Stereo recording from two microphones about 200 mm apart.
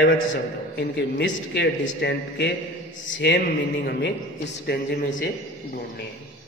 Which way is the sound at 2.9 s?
40° left (ahead or behind).